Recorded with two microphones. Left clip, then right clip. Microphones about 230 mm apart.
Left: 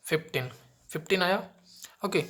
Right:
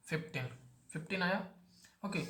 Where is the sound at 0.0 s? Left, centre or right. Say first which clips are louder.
Left 11 dB; left.